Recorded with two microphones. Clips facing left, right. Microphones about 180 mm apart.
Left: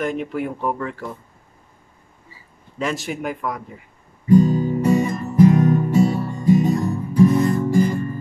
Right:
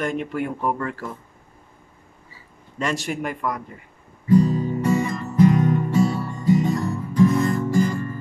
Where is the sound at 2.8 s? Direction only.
Centre (ahead or behind).